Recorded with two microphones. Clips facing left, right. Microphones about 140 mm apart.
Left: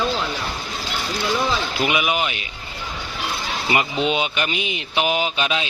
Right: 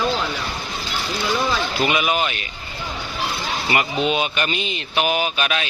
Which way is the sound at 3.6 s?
20° left (ahead or behind).